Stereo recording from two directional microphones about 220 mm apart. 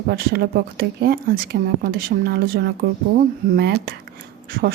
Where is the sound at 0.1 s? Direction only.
45° right (ahead or behind).